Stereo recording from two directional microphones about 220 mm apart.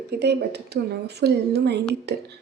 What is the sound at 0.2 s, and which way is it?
Speech, 50° right (ahead or behind).